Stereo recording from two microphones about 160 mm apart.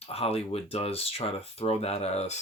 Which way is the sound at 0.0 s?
40° left (ahead or behind).